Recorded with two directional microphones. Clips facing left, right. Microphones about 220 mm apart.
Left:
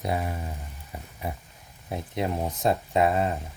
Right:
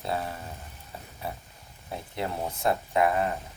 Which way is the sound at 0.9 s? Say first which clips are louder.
Left 2 dB; 15° left (ahead or behind).